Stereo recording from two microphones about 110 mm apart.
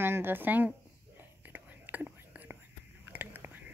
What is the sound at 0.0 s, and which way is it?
Speech, 20° right (ahead or behind).